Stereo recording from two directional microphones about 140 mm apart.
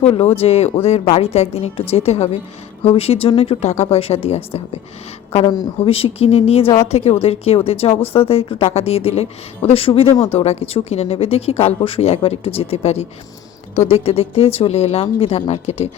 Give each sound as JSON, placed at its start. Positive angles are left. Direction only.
{"t": 0.0, "sound": "speech", "side_deg": 45}
{"t": 5.5, "sound": "speech", "side_deg": 30}
{"t": 5.9, "sound": "speech", "side_deg": 45}